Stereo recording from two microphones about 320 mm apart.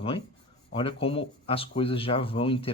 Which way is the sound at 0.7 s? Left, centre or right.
Centre.